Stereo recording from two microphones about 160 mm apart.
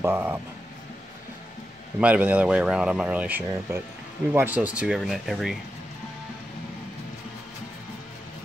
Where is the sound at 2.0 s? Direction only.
10° right (ahead or behind).